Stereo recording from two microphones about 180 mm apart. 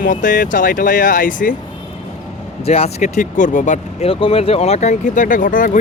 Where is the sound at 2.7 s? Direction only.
35° left (ahead or behind).